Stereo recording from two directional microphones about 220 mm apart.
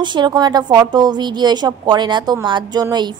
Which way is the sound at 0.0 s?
20° right (ahead or behind).